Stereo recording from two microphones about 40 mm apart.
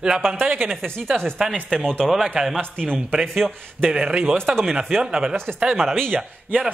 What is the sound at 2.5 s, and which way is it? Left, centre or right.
Speech, left.